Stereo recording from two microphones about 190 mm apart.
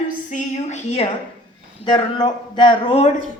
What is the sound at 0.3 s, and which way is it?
A woman's voice, 40° left (ahead or behind).